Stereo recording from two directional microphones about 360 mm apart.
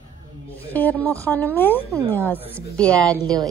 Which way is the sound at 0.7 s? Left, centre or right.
Centre.